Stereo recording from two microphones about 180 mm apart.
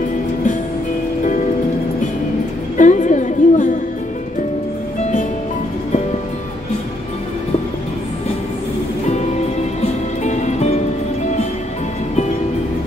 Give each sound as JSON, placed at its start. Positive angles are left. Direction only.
{"t": 2.8, "sound": "music", "side_deg": 45}
{"t": 9.8, "sound": "music", "side_deg": 40}